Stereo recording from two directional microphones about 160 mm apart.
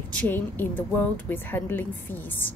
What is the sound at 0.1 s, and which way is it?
A woman's voice, 10° left (ahead or behind).